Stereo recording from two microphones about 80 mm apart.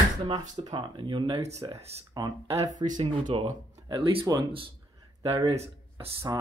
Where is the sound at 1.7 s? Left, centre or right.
Right.